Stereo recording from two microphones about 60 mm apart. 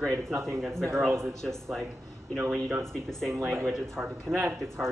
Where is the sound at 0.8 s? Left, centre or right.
Right.